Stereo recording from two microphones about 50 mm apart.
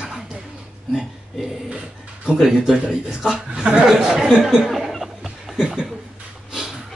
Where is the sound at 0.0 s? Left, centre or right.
Centre.